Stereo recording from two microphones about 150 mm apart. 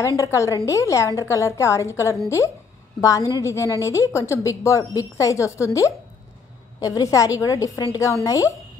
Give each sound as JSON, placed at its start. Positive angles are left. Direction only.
{"t": 0.2, "sound": "a woman's voice", "side_deg": 20}